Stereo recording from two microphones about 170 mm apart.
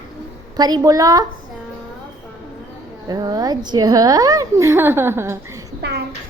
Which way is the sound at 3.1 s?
25° right (ahead or behind).